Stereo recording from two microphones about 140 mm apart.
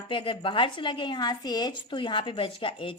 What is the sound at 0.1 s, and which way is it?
A woman's voice, 40° left (ahead or behind).